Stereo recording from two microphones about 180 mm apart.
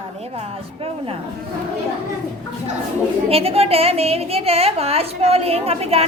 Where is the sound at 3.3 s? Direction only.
35° right (ahead or behind).